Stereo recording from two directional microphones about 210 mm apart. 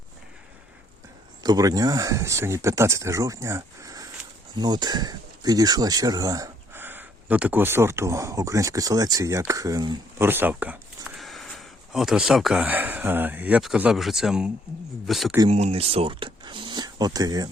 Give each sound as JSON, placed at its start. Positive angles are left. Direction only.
{"t": 1.5, "sound": "speech", "side_deg": -15}
{"t": 15.4, "sound": "speech", "side_deg": -30}